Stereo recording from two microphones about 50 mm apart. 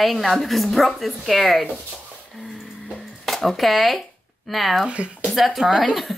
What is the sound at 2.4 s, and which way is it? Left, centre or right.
Music, centre.